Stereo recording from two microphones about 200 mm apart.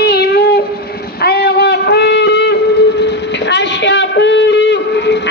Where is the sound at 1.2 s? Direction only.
50° left (ahead or behind).